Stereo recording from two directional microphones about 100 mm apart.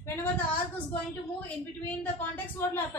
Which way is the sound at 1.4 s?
15° left (ahead or behind).